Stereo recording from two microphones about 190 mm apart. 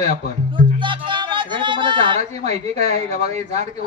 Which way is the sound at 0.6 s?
25° right (ahead or behind).